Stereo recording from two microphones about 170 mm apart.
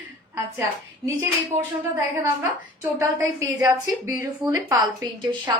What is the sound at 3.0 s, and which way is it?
A woman's voice, 20° right (ahead or behind).